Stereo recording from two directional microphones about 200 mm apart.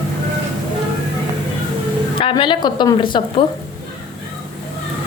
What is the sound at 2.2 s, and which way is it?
A woman's voice, 25° left (ahead or behind).